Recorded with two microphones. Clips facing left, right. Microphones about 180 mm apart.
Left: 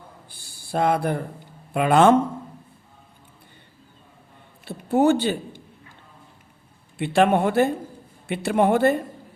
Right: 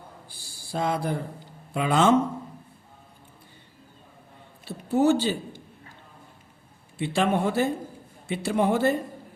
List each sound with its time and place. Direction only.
0.3 s a sound: 60° left (ahead or behind)
1.7 s a man's voice: 60° left (ahead or behind)
4.6 s a man's voice: 55° left (ahead or behind)
7.0 s a man's voice: 60° left (ahead or behind)